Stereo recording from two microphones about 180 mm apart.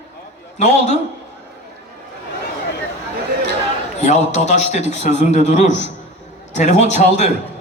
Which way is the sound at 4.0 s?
40° left (ahead or behind).